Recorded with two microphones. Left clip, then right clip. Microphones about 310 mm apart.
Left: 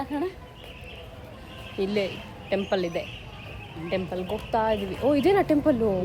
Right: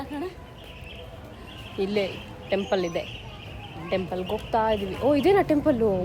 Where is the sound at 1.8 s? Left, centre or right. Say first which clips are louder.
Right 1 dB; centre.